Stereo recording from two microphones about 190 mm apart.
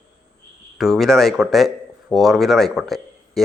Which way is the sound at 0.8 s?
Centre (ahead or behind).